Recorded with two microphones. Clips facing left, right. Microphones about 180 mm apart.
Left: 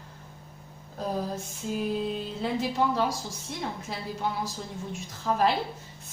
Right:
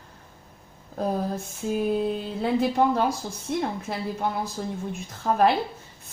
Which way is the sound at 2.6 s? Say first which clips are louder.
Right 4 dB; 50° right (ahead or behind).